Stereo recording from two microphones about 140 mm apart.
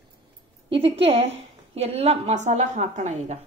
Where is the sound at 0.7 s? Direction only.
40° right (ahead or behind); by 3.3 s 55° right (ahead or behind).